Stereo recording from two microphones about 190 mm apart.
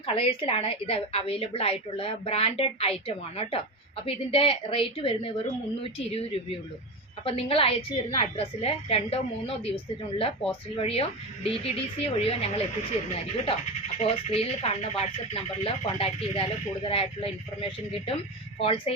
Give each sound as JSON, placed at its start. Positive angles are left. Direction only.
{"t": 0.0, "sound": "a woman's voice", "side_deg": 30}
{"t": 14.0, "sound": "a woman's voice", "side_deg": 30}